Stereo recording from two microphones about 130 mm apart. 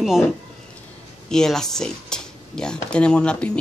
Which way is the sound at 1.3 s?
5° left (ahead or behind).